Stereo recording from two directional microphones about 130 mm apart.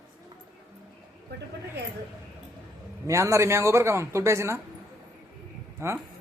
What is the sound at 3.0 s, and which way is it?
Speech, 25° right (ahead or behind).